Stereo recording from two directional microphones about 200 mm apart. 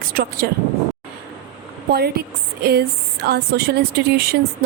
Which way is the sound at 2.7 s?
55° right (ahead or behind).